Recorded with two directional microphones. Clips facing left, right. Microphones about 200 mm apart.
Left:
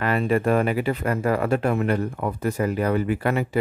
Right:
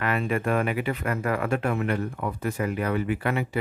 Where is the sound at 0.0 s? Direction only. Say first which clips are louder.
Left 5 dB; 35° left (ahead or behind).